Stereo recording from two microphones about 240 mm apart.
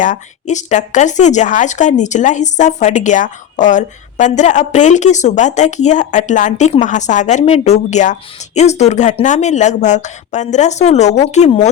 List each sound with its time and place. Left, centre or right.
0.0 s speech: left